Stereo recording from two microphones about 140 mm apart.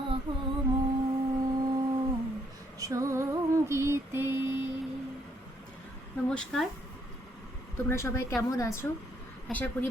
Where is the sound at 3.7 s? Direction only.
20° right (ahead or behind).